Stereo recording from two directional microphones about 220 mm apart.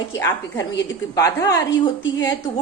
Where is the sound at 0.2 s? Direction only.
15° left (ahead or behind).